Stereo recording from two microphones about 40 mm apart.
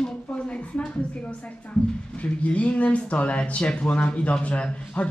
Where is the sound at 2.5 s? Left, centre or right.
Left.